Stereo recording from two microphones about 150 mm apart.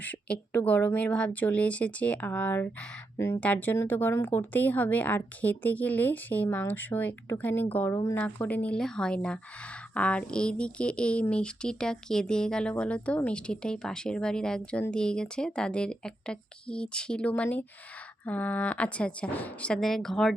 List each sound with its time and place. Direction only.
0.0 s a woman's voice: 10° left (ahead or behind)